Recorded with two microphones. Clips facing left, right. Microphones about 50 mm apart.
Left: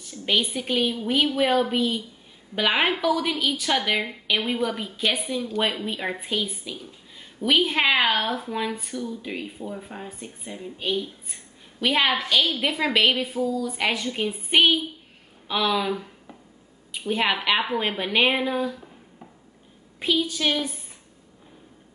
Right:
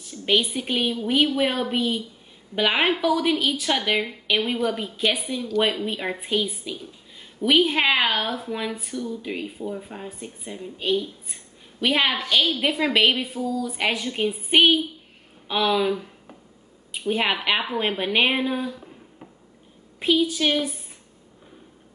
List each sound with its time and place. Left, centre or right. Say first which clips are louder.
0.0 s a woman's voice: right 2 dB; centre
17.1 s a woman's voice: even; centre
20.0 s a woman's voice: right 3 dB; centre